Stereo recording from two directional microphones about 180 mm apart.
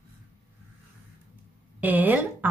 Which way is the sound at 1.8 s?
10° right (ahead or behind).